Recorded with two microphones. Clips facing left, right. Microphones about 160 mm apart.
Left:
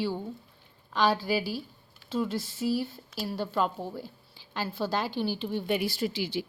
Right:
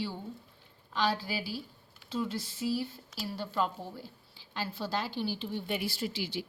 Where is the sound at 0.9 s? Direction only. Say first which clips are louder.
Left 6 dB; 55° left (ahead or behind).